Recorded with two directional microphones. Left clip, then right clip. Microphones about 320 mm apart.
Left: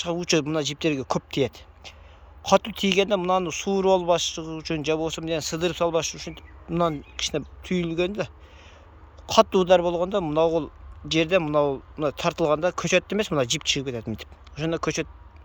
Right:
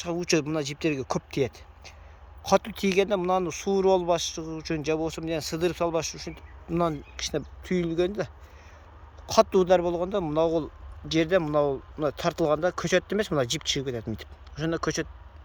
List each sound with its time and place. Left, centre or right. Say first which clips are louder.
0.0 s speech: left 2 dB; centre